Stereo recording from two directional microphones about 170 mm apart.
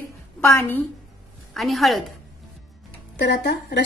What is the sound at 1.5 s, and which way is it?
Speech, centre (ahead or behind).